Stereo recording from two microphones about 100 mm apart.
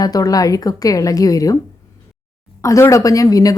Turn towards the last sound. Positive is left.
turn(degrees=35)  # may be behind; listen again after turning